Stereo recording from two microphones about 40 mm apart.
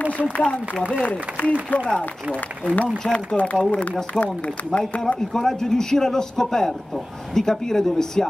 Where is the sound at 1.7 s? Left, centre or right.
Left.